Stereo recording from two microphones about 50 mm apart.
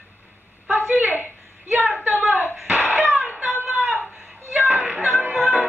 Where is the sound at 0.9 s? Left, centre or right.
Right.